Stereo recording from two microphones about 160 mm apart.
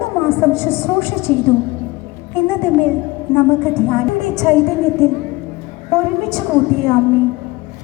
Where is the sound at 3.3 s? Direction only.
5° left (ahead or behind).